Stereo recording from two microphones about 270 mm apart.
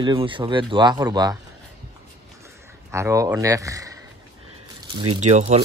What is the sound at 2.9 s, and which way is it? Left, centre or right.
A man's voice, centre.